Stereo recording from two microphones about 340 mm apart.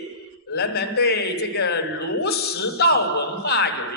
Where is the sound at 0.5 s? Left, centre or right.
Left.